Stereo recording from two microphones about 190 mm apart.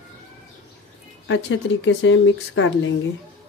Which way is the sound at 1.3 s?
70° left (ahead or behind).